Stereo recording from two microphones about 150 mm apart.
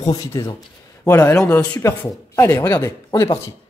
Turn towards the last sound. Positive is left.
turn(degrees=20)  # may be behind; listen again after turning